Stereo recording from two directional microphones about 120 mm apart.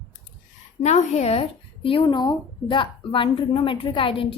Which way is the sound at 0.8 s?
75° left (ahead or behind).